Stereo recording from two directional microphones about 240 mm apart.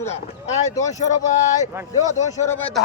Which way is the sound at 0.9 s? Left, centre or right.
Left.